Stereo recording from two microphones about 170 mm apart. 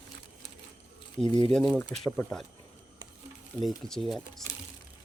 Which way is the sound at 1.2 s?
5° left (ahead or behind).